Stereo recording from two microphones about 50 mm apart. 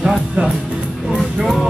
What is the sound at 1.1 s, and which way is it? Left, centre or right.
Music, centre.